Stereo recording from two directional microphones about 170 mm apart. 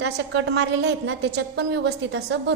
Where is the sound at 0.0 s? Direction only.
90° right.